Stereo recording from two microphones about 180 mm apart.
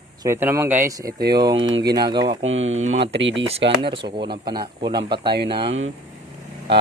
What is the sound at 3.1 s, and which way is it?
Speech, 90° right.